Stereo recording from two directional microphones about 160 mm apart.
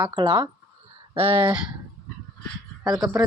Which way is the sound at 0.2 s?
30° right (ahead or behind).